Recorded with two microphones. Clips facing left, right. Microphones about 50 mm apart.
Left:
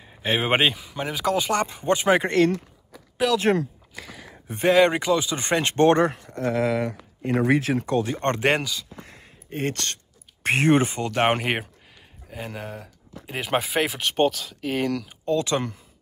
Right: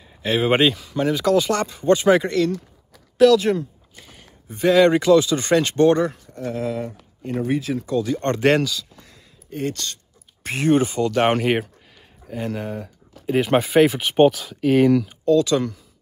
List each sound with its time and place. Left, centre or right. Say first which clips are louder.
0.0 s speech: right 3 dB; left
2.9 s a sound: right 9 dB; centre
4.6 s speech: right 3 dB; left
8.4 s speech: right 5 dB; centre
8.9 s a sound: left 5 dB; left
10.4 s speech: right 1 dB; left
11.1 s speech: right 3 dB; centre
12.3 s speech: right 7 dB; centre
15.2 s speech: right 5 dB; left